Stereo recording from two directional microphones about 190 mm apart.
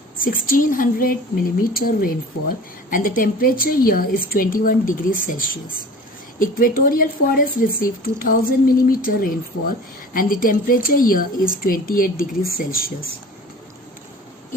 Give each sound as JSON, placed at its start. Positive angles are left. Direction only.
{"t": 0.2, "sound": "speech", "side_deg": 45}